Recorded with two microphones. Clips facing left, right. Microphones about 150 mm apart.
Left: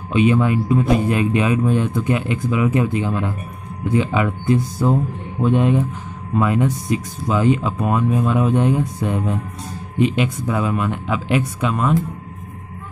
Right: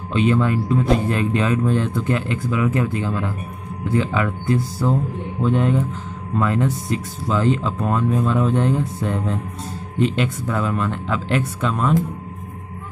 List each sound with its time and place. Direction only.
0.1 s speech: 15° left (ahead or behind)